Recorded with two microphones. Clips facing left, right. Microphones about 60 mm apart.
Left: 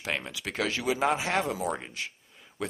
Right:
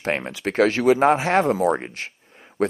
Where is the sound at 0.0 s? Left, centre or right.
Right.